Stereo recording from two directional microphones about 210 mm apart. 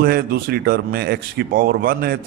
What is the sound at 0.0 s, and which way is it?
A man's voice, 45° right (ahead or behind).